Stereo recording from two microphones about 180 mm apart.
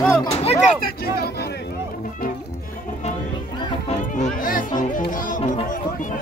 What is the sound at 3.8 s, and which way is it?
Music, 40° left (ahead or behind).